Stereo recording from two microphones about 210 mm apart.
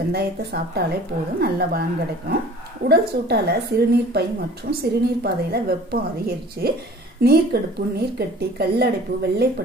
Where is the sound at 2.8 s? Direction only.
50° right (ahead or behind).